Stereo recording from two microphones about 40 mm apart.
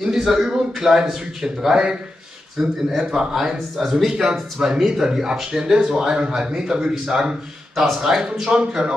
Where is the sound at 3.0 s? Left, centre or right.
Centre.